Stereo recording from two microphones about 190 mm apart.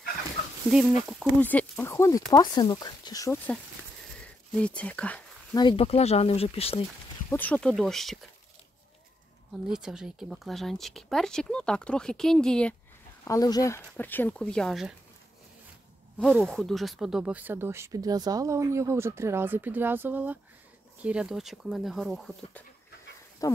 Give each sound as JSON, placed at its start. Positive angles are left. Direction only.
{"t": 0.7, "sound": "speech", "side_deg": -5}
{"t": 1.4, "sound": "speech", "side_deg": 10}
{"t": 4.2, "sound": "a sound", "side_deg": 5}
{"t": 5.6, "sound": "speech", "side_deg": 25}
{"t": 7.2, "sound": "speech", "side_deg": 10}
{"t": 9.7, "sound": "speech", "side_deg": -5}
{"t": 13.2, "sound": "speech", "side_deg": 20}
{"t": 16.2, "sound": "speech", "side_deg": 0}
{"t": 23.4, "sound": "speech", "side_deg": 15}